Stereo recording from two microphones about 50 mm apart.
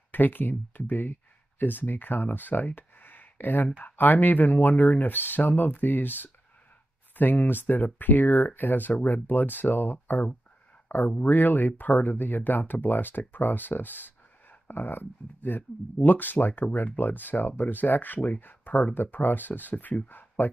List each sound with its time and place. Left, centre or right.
0.1 s speech: left